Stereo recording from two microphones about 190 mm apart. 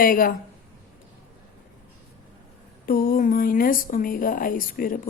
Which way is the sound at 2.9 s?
50° left (ahead or behind).